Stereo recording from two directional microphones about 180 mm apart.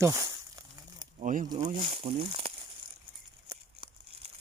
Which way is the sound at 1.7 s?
30° right (ahead or behind).